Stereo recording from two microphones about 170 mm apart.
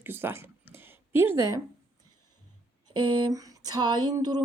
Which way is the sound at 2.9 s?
25° right (ahead or behind).